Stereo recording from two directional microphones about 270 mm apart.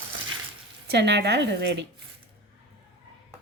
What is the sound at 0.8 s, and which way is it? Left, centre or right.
Speech, right.